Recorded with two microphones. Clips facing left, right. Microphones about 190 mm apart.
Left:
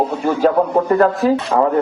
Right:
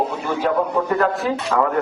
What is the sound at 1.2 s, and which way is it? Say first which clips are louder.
Speech: left 8 dB; 40° left (ahead or behind).